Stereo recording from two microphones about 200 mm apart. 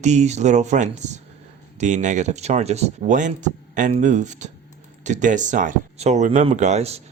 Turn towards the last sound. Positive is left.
turn(degrees=-30)  # may be behind; listen again after turning